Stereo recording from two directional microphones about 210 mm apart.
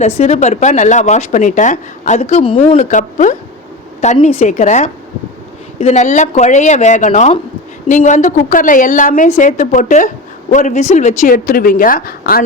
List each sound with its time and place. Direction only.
0.0 s speech: 30° left (ahead or behind)